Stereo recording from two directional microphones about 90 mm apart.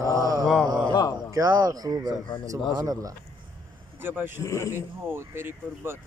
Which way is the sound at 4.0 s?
25° right (ahead or behind).